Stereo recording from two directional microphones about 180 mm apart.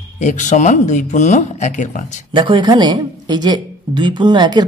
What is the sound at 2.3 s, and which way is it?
Speech, 25° right (ahead or behind).